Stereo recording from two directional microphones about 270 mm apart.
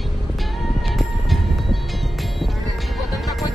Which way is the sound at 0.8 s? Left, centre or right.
Centre.